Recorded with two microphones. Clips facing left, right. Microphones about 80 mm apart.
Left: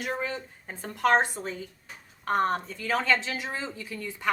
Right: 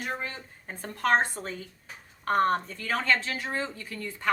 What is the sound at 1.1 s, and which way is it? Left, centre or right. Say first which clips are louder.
Speech: right 2 dB; centre.